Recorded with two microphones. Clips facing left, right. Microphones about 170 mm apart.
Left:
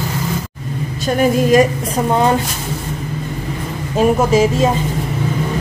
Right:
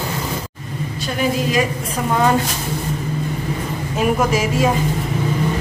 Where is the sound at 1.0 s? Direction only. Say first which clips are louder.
Left 6 dB; 45° left (ahead or behind).